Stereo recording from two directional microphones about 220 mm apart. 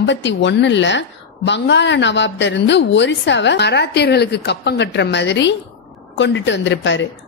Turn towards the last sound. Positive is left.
turn(degrees=55)  # may be behind; listen again after turning